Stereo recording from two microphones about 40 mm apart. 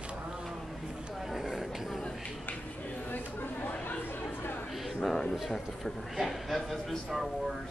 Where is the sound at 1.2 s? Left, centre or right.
Centre.